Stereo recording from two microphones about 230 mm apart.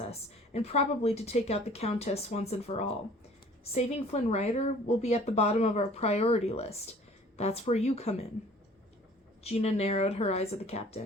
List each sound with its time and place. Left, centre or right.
0.0 s speech: left
9.4 s speech: left